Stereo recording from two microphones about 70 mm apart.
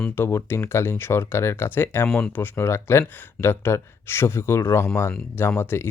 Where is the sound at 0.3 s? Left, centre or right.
Left.